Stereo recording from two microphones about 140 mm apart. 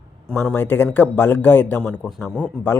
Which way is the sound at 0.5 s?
15° left (ahead or behind).